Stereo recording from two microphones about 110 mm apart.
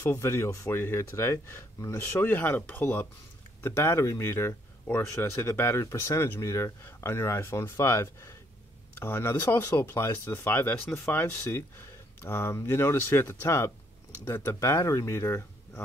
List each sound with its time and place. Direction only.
0.0 s speech: 25° left (ahead or behind)